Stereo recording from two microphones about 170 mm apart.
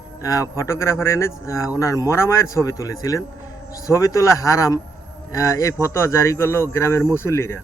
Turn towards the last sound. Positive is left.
turn(degrees=15)  # may be behind; listen again after turning